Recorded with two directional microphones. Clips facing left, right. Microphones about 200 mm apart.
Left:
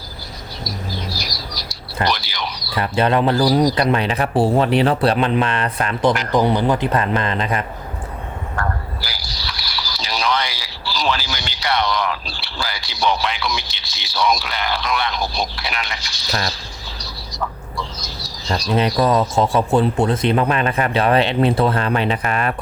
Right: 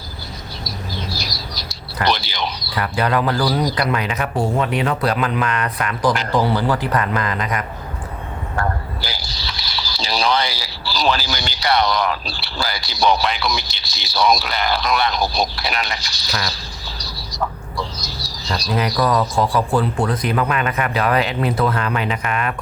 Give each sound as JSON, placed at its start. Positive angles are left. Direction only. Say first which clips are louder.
{"t": 0.6, "sound": "bird", "louder": "left 2 dB", "side_deg": -25}
{"t": 2.0, "sound": "a sound", "louder": "right 4 dB", "side_deg": -25}
{"t": 2.7, "sound": "speech", "louder": "left 3 dB", "side_deg": 25}
{"t": 9.0, "sound": "speech", "louder": "right 2 dB", "side_deg": -25}
{"t": 17.3, "sound": "chicken", "louder": "right 2 dB", "side_deg": -35}
{"t": 18.9, "sound": "speech", "louder": "even", "side_deg": 30}